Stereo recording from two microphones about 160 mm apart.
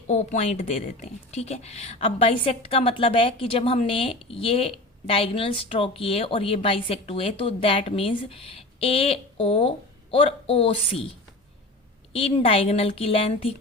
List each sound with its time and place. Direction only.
0.1 s speech: 45° left (ahead or behind)
12.1 s speech: 35° left (ahead or behind)